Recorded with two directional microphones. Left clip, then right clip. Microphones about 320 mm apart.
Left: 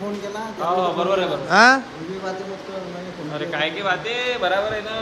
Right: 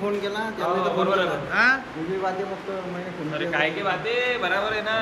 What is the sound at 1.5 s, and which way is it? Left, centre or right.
Speech, centre.